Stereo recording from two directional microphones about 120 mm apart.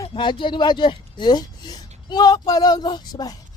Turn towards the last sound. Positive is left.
turn(degrees=35)  # may be behind; listen again after turning